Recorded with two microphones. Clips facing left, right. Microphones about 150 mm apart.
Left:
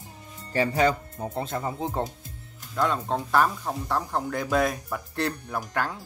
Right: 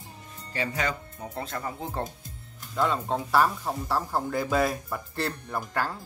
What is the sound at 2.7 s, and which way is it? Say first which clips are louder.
Speech: left 1 dB; centre (ahead or behind).